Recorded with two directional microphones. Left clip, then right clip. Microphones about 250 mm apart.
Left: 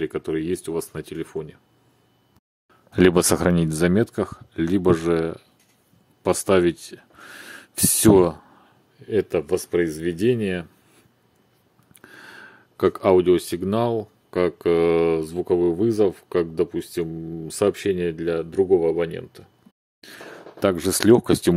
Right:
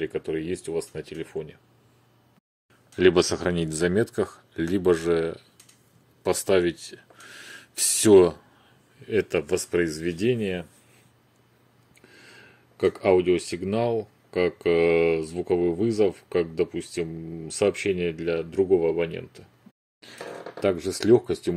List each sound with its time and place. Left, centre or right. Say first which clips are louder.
0.0 s speech: left 3 dB; left
3.0 s speech: left 3 dB; left
9.0 s speech: left 2 dB; centre
12.0 s a sound: left 7 dB; left
13.9 s speech: left 2 dB; centre
20.0 s speech: right 2 dB; left